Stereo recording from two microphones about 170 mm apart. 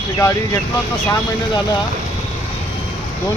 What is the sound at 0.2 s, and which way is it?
Speech, 15° left (ahead or behind).